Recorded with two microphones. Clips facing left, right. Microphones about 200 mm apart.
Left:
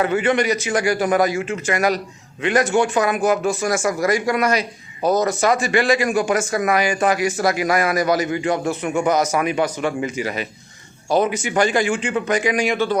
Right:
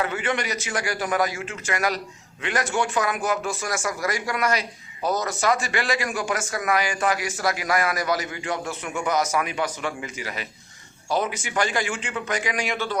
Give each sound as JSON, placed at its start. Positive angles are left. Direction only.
{"t": 0.0, "sound": "a man's voice", "side_deg": 20}